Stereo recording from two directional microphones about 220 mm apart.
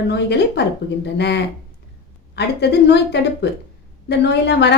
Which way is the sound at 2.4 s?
50° left (ahead or behind).